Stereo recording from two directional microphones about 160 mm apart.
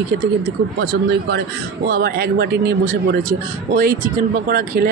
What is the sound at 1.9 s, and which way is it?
Speech, 80° right.